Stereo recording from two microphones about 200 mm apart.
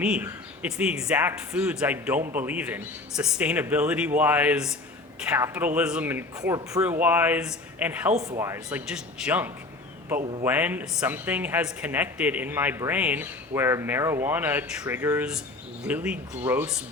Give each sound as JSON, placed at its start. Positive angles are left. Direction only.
{"t": 0.0, "sound": "speech", "side_deg": -5}
{"t": 8.1, "sound": "speech", "side_deg": -35}
{"t": 8.4, "sound": "speech", "side_deg": -10}